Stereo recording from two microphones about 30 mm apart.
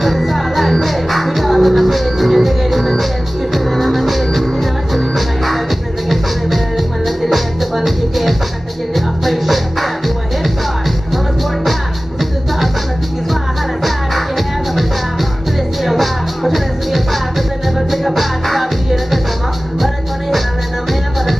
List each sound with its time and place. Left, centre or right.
0.0 s music: centre
7.1 s music: centre
13.8 s music: centre
19.8 s music: centre